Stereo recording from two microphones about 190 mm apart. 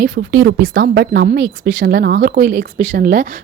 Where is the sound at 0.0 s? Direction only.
65° right (ahead or behind).